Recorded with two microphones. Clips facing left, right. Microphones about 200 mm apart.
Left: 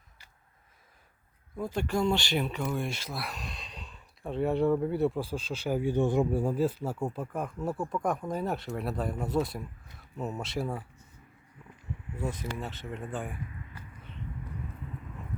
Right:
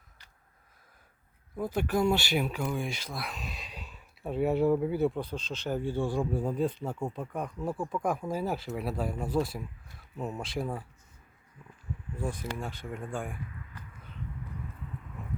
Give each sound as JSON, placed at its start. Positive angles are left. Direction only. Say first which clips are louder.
{"t": 1.5, "sound": "speech", "louder": "right 1 dB", "side_deg": -10}
{"t": 6.4, "sound": "speech", "louder": "left 2 dB", "side_deg": 5}
{"t": 12.3, "sound": "speech", "louder": "even", "side_deg": -10}